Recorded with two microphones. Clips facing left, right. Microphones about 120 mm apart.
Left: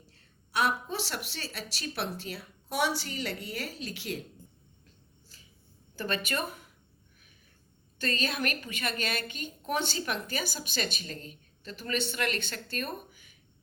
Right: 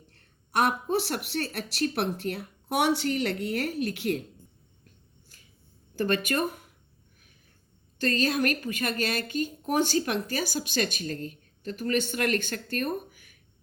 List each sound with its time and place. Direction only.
0.1 s a woman's voice: 60° right (ahead or behind)
6.0 s a woman's voice: 50° right (ahead or behind)
8.0 s a woman's voice: 45° right (ahead or behind)